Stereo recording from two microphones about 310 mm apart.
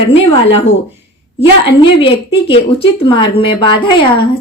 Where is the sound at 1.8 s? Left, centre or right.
Centre.